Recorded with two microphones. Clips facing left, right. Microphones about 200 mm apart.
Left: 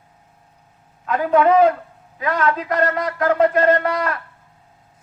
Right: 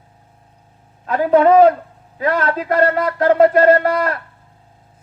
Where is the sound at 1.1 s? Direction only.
35° right (ahead or behind).